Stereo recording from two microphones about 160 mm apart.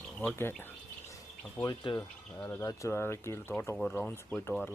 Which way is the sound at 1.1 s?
20° left (ahead or behind).